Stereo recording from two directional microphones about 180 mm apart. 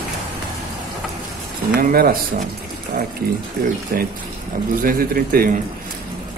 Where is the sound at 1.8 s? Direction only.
55° right (ahead or behind).